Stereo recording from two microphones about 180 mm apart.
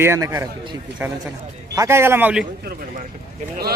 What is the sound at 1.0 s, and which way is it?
A man's voice, 10° right (ahead or behind).